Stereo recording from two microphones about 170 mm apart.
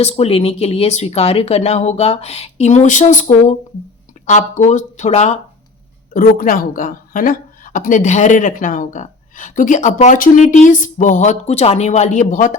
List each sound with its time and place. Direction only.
0.0 s a woman's voice: 35° left (ahead or behind)
6.1 s a woman's voice: 55° left (ahead or behind)